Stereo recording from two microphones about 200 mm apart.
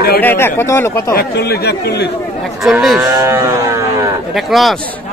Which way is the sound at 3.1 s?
15° right (ahead or behind).